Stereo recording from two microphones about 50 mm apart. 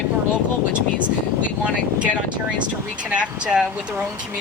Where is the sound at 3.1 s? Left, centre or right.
Right.